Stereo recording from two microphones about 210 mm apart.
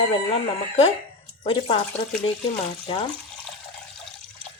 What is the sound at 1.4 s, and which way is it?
Speech, 25° left (ahead or behind).